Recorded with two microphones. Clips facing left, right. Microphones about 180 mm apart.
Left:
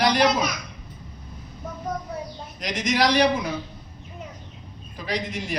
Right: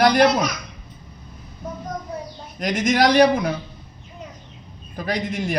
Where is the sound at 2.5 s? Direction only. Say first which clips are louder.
Right 5 dB; 50° right (ahead or behind).